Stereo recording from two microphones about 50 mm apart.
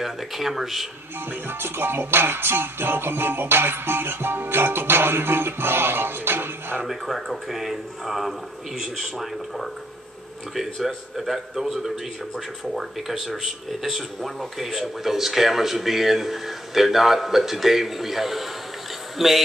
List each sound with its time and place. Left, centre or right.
0.0 s speech: centre
1.3 s music: right
6.9 s a man's voice: centre